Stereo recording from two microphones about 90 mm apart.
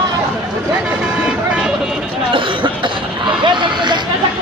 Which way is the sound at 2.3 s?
65° right (ahead or behind).